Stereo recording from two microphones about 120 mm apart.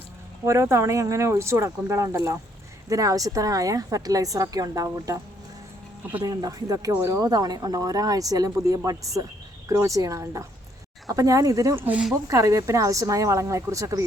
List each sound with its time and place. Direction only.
0.4 s a woman's voice: 25° right (ahead or behind)
6.2 s a woman's voice: 30° right (ahead or behind)
11.8 s speech: 15° right (ahead or behind)
12.3 s a woman's voice: 30° right (ahead or behind)